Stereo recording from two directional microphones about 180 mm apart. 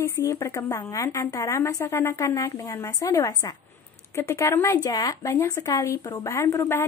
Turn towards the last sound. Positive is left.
turn(degrees=15)  # may be behind; listen again after turning